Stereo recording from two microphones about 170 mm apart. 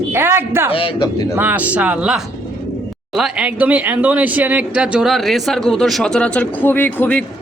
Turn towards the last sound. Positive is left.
turn(degrees=10)  # may be behind; listen again after turning